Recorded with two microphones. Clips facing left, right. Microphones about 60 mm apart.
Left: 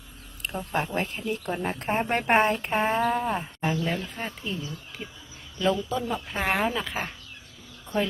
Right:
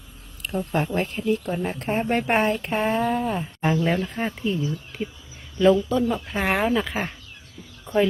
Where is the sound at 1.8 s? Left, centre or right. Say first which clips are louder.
Right 3 dB; left.